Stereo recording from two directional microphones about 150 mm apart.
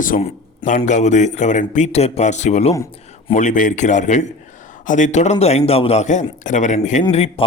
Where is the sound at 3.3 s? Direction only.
55° left (ahead or behind).